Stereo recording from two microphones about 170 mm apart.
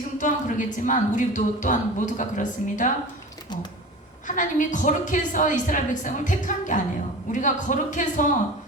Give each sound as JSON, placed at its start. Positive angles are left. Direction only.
{"t": 0.2, "sound": "speech", "side_deg": 50}
{"t": 4.3, "sound": "speech", "side_deg": 50}